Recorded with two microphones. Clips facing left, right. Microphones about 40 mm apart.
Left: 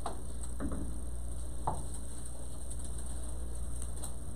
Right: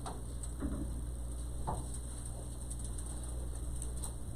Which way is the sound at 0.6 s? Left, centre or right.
Centre.